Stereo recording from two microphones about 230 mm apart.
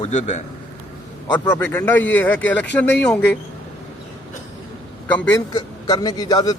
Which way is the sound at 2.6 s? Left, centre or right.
Left.